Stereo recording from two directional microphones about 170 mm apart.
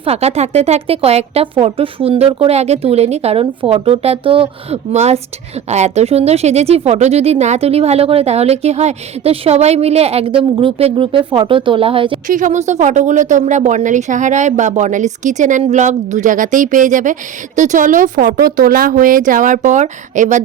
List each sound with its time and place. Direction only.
0.0 s a woman's voice: 35° right (ahead or behind)
12.3 s a woman's voice: 50° right (ahead or behind)